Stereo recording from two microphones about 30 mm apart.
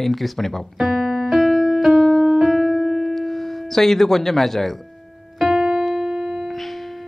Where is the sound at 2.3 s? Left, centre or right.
Centre.